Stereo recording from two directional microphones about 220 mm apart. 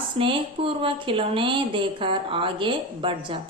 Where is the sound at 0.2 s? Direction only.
25° right (ahead or behind).